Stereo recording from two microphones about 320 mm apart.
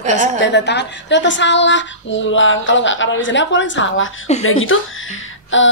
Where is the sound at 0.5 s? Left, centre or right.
Left.